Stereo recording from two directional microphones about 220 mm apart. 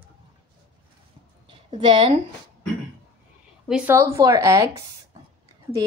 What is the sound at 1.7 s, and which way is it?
Speech, 20° right (ahead or behind).